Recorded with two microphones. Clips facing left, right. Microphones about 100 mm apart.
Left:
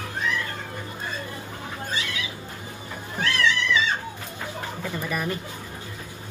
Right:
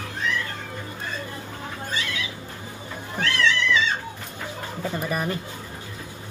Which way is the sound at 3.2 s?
15° left (ahead or behind).